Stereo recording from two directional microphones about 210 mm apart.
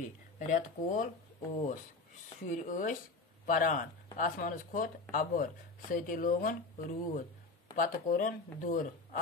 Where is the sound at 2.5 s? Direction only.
40° left (ahead or behind).